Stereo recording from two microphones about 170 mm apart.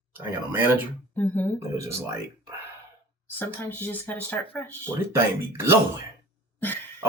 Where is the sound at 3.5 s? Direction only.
15° left (ahead or behind).